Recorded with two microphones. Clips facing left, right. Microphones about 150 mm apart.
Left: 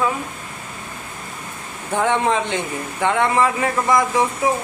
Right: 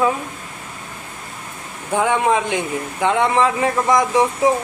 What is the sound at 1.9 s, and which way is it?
Speech, 15° right (ahead or behind).